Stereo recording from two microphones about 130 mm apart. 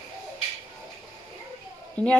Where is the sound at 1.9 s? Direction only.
10° left (ahead or behind).